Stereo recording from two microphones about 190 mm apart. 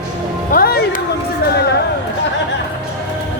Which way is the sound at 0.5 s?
55° left (ahead or behind).